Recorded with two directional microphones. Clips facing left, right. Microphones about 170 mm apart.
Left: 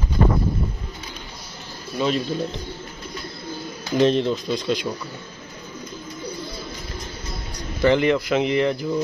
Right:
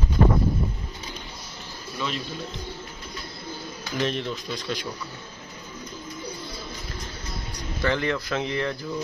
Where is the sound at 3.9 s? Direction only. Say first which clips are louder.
Left 9 dB; 30° left (ahead or behind).